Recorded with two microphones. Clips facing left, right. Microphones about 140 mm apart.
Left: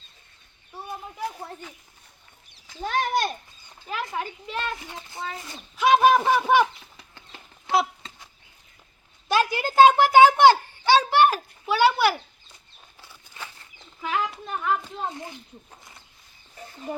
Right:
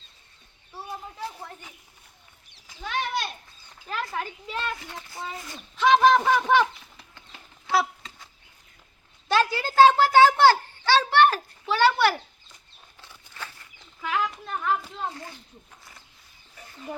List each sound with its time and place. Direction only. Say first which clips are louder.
0.7 s a sound: left 1 dB; 15° left (ahead or behind)
2.8 s speech: left 5 dB; 45° left (ahead or behind)
4.1 s speech: left 1 dB; centre (ahead or behind)
4.6 s speech: left 1 dB; 20° left (ahead or behind)
5.7 s speech: even; 10° left (ahead or behind)
7.7 s dog: left 1 dB; 20° left (ahead or behind)
9.3 s a sound: left 1 dB; 15° left (ahead or behind)
13.0 s bird flight: even; 15° left (ahead or behind)
13.6 s a sound: left 2 dB; 20° left (ahead or behind)
15.1 s speech: left 3 dB; 20° left (ahead or behind)